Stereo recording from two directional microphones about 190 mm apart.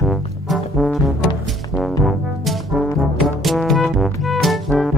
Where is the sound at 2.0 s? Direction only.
Centre (ahead or behind).